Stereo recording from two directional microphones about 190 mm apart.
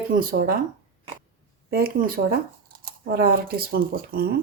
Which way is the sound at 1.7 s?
55° right (ahead or behind).